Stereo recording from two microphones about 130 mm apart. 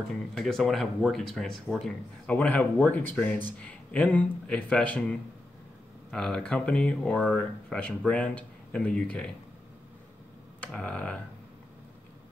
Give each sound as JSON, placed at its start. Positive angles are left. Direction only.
{"t": 0.1, "sound": "speech", "side_deg": 5}
{"t": 10.6, "sound": "speech", "side_deg": 10}